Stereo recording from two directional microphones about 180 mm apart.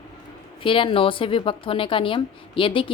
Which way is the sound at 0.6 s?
30° left (ahead or behind).